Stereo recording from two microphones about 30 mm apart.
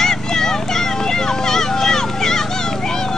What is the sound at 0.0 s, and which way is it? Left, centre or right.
Vehicle, centre.